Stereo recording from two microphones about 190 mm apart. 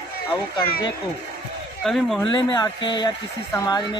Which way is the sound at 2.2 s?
25° left (ahead or behind).